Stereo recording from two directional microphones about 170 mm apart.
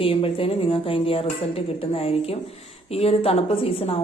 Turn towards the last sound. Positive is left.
turn(degrees=35)  # may be behind; listen again after turning